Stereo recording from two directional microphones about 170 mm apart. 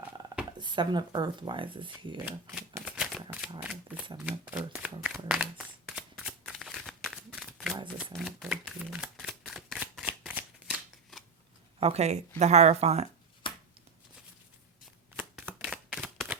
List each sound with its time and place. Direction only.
0.6 s speech: 25° right (ahead or behind)
2.2 s shuffling cards: 10° right (ahead or behind)
3.6 s speech: 5° right (ahead or behind)
4.2 s shuffling cards: 10° right (ahead or behind)
11.8 s speech: 40° right (ahead or behind)
13.4 s a sound: 30° left (ahead or behind)
15.1 s shuffling cards: 10° right (ahead or behind)